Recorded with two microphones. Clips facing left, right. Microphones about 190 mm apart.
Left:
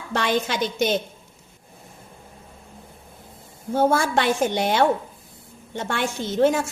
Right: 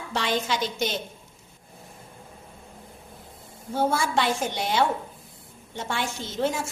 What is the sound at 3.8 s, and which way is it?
A woman's voice, 50° left (ahead or behind).